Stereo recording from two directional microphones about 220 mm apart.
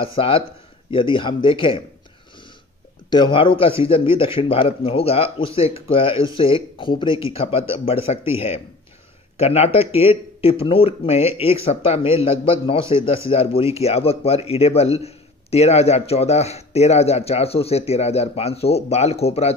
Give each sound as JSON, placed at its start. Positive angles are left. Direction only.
{"t": 0.0, "sound": "a man's voice", "side_deg": 25}
{"t": 3.1, "sound": "a man's voice", "side_deg": 20}